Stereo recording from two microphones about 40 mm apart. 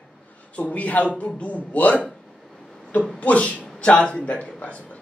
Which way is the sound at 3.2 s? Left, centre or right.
Left.